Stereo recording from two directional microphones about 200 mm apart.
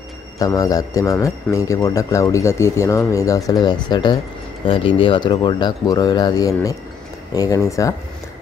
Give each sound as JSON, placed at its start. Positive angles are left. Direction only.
{"t": 0.4, "sound": "speech", "side_deg": 15}